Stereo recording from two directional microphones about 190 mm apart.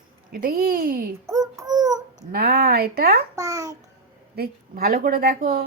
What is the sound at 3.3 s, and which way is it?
Babbling, 20° right (ahead or behind).